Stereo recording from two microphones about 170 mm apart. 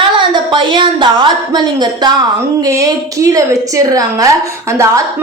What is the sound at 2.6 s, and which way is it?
Speech, 20° right (ahead or behind).